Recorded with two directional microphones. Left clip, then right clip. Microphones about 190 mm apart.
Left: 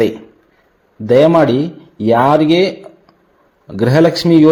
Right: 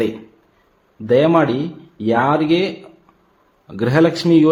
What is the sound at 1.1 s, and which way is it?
A man's voice, 20° left (ahead or behind).